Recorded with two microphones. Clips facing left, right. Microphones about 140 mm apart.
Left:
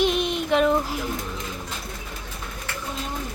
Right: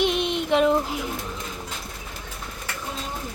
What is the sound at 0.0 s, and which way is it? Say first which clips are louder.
Child singing: left 1 dB; 20° right (ahead or behind).